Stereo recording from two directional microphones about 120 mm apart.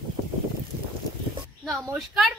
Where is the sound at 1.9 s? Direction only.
5° right (ahead or behind).